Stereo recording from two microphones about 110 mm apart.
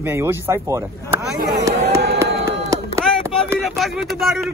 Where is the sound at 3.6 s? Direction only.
Centre (ahead or behind).